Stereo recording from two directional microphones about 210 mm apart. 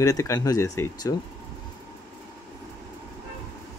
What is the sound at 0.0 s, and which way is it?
Speech, 15° left (ahead or behind).